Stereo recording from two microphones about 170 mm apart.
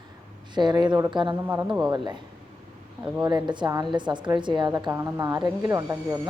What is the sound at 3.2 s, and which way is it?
A woman's voice, 25° right (ahead or behind).